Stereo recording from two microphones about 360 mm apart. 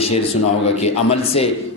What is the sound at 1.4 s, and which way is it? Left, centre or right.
Speech, centre.